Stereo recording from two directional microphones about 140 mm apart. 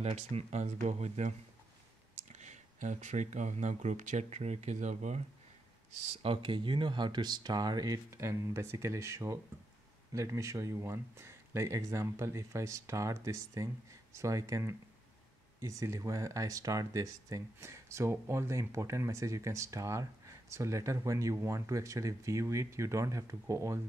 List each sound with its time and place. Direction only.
0.0 s speech: 50° right (ahead or behind)
2.3 s speech: 55° right (ahead or behind)
6.2 s speech: 40° right (ahead or behind); by 23.8 s 20° right (ahead or behind)